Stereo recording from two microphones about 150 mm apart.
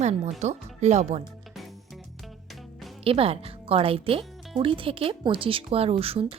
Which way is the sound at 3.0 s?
40° right (ahead or behind).